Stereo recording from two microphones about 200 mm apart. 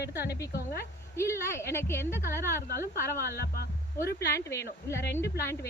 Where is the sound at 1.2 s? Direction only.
15° left (ahead or behind).